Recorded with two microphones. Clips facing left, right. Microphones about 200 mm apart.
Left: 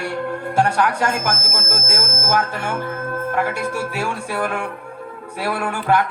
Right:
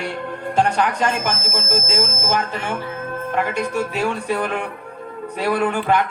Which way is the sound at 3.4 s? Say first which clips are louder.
Right 3 dB; 10° left (ahead or behind).